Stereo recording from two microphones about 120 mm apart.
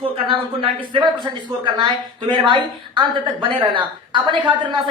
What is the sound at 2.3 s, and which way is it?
A woman's voice, 40° right (ahead or behind).